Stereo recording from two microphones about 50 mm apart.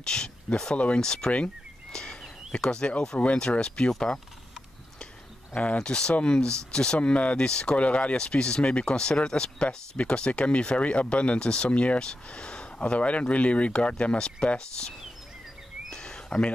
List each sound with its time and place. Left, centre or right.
0.0 s speech: centre
0.7 s speech: left
1.0 s speech: centre
1.9 s a sound: centre
3.2 s speech: left
5.5 s speech: left
15.9 s a sound: centre